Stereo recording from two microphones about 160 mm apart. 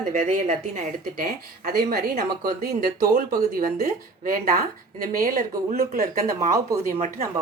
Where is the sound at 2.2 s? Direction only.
80° right.